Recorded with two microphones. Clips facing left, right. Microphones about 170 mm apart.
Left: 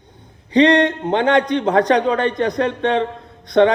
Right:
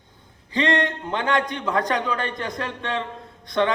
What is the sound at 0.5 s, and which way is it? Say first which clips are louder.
A man's voice: left 9 dB; 20° left (ahead or behind).